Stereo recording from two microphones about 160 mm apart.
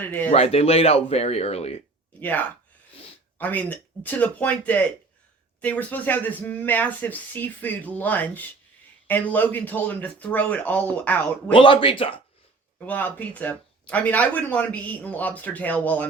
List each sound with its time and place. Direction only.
0.3 s speech: 40° left (ahead or behind)
2.2 s speech: 10° left (ahead or behind)
11.5 s speech: 30° left (ahead or behind)
12.8 s speech: 10° left (ahead or behind)